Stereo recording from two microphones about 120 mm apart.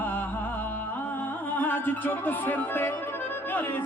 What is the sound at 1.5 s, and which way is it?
Music, 15° left (ahead or behind).